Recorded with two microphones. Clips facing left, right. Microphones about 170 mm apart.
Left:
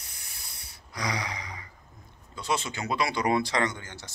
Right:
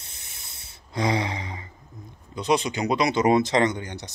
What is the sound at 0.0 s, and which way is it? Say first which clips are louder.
Hiss: right 1 dB; 25° right (ahead or behind).